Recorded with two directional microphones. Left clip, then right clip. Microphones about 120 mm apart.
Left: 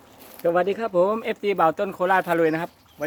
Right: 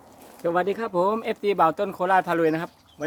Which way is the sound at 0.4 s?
10° right (ahead or behind).